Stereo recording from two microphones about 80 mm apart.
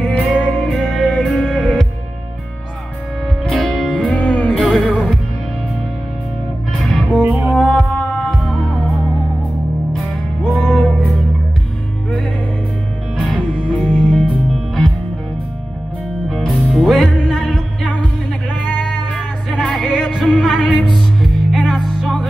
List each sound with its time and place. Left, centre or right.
0.0 s music: centre
3.4 s music: centre
4.6 s music: centre
6.8 s music: centre
7.5 s music: centre
10.5 s music: centre
13.2 s music: centre
16.3 s music: centre
19.1 s music: centre